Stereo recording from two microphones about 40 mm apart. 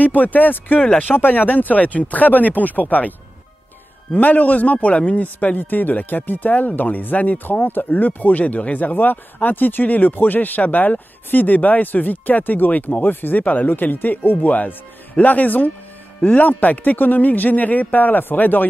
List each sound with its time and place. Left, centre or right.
0.0 s speech: left
16.2 s speech: left
16.4 s speech: left